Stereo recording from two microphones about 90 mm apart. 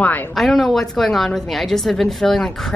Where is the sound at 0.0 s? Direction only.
20° left (ahead or behind).